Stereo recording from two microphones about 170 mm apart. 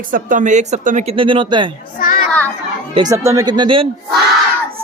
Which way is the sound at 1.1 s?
30° right (ahead or behind).